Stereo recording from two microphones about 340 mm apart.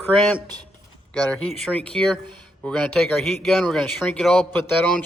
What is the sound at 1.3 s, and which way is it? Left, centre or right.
A man's voice, centre.